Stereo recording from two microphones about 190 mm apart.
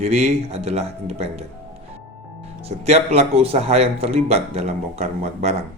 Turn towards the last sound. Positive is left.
turn(degrees=-35)  # may be behind; listen again after turning